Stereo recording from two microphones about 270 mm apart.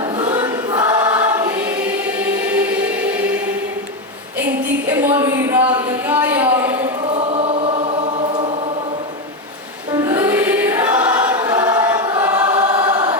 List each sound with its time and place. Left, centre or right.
0.2 s choir: centre
4.9 s a sound: centre
6.8 s choir: right
9.9 s choir: centre